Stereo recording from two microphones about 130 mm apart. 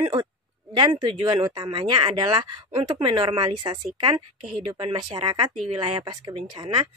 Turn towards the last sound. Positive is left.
turn(degrees=-35)  # may be behind; listen again after turning